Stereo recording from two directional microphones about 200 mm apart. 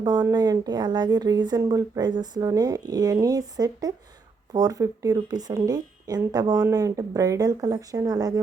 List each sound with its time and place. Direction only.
0.0 s a woman's voice: 20° right (ahead or behind)